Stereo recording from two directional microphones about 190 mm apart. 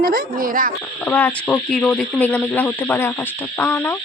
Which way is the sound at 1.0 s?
10° left (ahead or behind).